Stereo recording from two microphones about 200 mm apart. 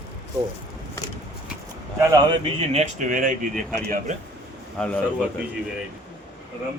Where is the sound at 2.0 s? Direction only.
15° right (ahead or behind).